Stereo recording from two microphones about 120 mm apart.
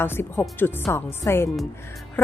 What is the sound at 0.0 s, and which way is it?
A woman's voice, 20° left (ahead or behind).